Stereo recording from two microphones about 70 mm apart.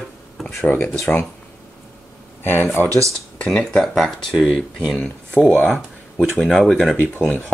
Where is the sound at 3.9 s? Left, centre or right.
Centre.